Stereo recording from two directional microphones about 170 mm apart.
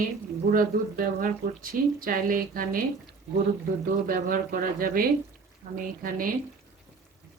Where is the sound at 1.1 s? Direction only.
55° right (ahead or behind).